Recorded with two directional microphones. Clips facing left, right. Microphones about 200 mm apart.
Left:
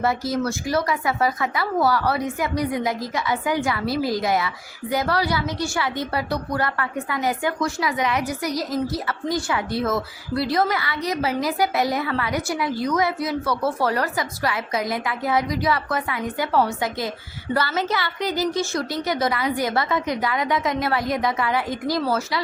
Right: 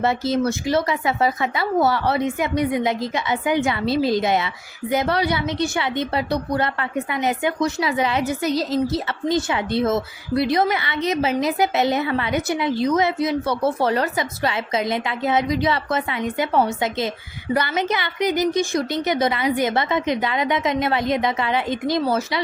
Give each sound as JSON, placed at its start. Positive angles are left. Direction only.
{"t": 0.0, "sound": "speech", "side_deg": -25}